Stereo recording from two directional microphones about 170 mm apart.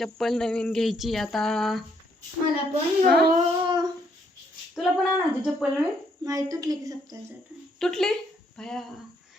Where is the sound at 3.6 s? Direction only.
25° right (ahead or behind).